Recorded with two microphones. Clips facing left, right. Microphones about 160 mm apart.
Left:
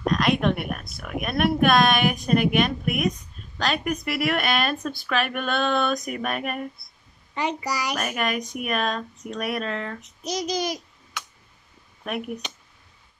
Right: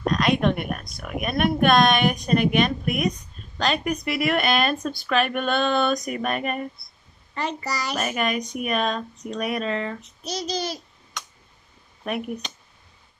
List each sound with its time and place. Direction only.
0.0 s speech: centre (ahead or behind)
7.3 s a child's voice: 10° left (ahead or behind)
8.0 s speech: centre (ahead or behind)
10.2 s a child's voice: 15° left (ahead or behind)
12.1 s speech: centre (ahead or behind)